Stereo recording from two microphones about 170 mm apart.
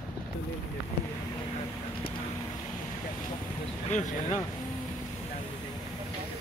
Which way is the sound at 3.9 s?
45° left (ahead or behind).